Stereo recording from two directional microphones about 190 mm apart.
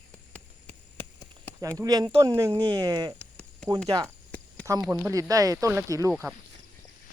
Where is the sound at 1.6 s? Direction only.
15° right (ahead or behind).